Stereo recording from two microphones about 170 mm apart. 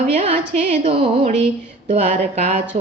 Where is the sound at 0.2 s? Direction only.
40° right (ahead or behind).